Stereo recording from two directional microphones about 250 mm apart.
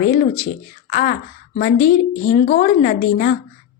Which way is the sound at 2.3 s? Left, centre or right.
Left.